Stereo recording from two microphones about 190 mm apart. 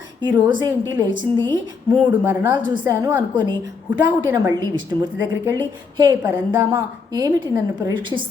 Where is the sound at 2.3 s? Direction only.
10° right (ahead or behind).